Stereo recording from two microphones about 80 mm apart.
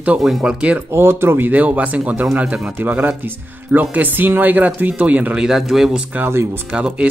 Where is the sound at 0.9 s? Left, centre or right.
Right; by 6.0 s centre.